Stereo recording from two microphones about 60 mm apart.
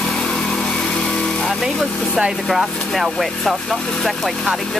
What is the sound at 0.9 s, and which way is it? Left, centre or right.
Vehicle, centre.